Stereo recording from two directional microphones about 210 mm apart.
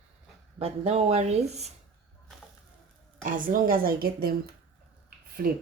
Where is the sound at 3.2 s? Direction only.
40° right (ahead or behind).